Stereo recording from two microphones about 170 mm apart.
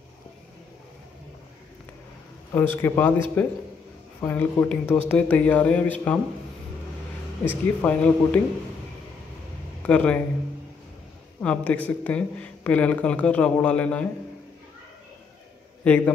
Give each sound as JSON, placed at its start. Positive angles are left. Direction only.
{"t": 2.5, "sound": "speech", "side_deg": 15}
{"t": 7.4, "sound": "speech", "side_deg": 10}
{"t": 9.8, "sound": "a man's voice", "side_deg": 5}
{"t": 11.4, "sound": "speech", "side_deg": 10}
{"t": 15.8, "sound": "speech", "side_deg": 10}